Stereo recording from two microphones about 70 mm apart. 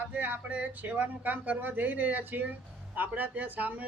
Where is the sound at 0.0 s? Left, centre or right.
Right.